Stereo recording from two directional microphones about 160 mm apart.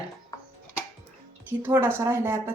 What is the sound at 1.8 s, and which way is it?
Speech, 15° right (ahead or behind).